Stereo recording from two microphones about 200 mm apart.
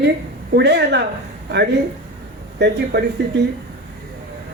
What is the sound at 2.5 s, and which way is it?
Speech, 55° right (ahead or behind).